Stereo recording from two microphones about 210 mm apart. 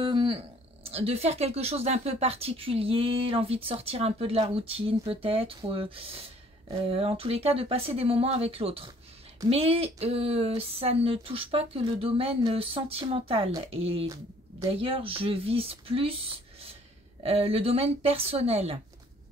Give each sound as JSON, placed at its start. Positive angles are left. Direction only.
{"t": 0.0, "sound": "a sound", "side_deg": -25}
{"t": 0.8, "sound": "speech", "side_deg": -30}
{"t": 14.0, "sound": "speech", "side_deg": -15}